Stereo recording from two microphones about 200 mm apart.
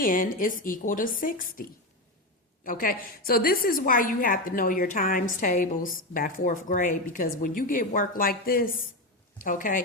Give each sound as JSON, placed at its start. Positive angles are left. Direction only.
{"t": 0.0, "sound": "a woman's voice", "side_deg": 45}
{"t": 2.6, "sound": "a woman's voice", "side_deg": 45}